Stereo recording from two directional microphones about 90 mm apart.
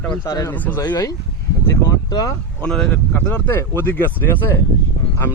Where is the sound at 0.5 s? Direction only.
20° left (ahead or behind).